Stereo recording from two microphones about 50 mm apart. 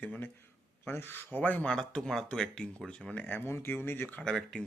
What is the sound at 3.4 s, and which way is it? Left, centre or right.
Speech, left.